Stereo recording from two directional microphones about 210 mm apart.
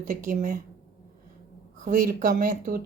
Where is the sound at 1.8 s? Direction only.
40° right (ahead or behind).